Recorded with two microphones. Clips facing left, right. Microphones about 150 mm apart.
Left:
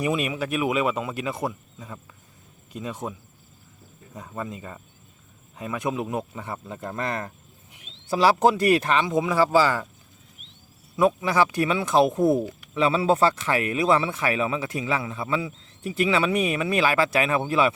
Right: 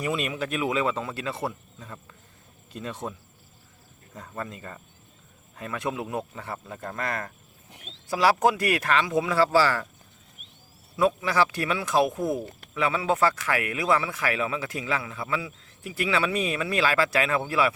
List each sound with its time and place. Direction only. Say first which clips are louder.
0.0 s speech: left 3 dB; 15° left (ahead or behind)
10.9 s speech: left 2 dB; 20° left (ahead or behind)